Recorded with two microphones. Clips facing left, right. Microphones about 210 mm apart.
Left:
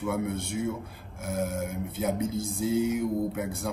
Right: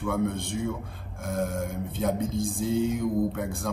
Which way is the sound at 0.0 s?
5° left (ahead or behind).